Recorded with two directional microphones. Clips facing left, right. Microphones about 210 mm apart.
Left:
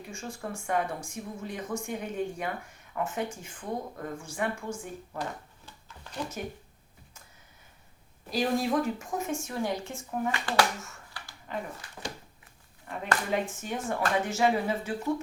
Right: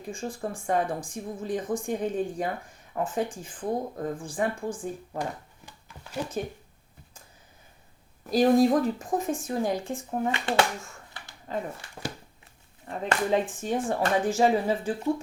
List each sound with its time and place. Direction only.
0.1 s speech: 30° right (ahead or behind)
5.1 s a sound: 15° right (ahead or behind)
8.3 s speech: 35° right (ahead or behind)
11.1 s dog: 20° right (ahead or behind)
12.9 s speech: 30° right (ahead or behind)